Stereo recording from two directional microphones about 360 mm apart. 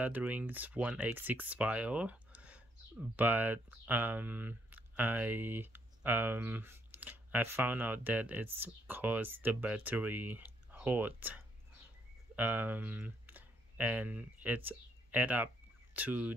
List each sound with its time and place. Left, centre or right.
0.0 s speech: centre